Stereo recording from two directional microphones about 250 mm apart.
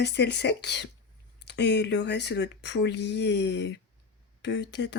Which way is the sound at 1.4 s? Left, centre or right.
Left.